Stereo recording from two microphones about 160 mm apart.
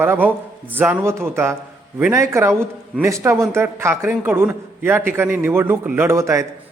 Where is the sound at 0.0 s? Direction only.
10° right (ahead or behind).